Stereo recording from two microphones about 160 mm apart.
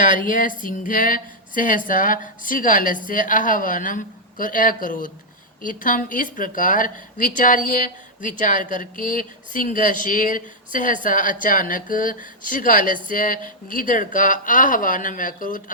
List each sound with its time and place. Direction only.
0.0 s a woman's voice: 55° left (ahead or behind)